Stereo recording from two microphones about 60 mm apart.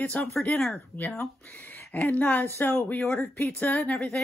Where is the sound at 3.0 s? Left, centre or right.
Left.